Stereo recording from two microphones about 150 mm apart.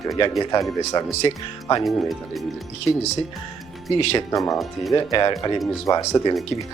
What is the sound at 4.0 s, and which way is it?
Speech, 40° left (ahead or behind).